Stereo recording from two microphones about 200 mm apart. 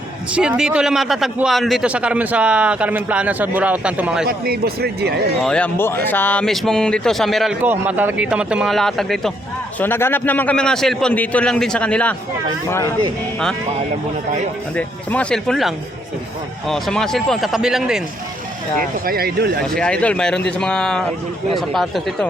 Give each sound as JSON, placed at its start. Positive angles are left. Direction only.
{"t": 0.3, "sound": "speech", "side_deg": -5}
{"t": 4.3, "sound": "speech", "side_deg": -50}
{"t": 5.4, "sound": "a man's voice", "side_deg": 5}
{"t": 14.8, "sound": "speech", "side_deg": 5}
{"t": 19.0, "sound": "speech", "side_deg": -50}
{"t": 19.7, "sound": "speech", "side_deg": 5}